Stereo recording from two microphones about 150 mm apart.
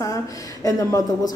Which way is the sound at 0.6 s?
20° left (ahead or behind).